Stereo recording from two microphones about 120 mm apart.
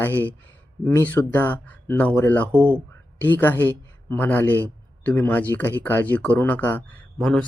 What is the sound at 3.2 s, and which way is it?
Speech, 15° left (ahead or behind).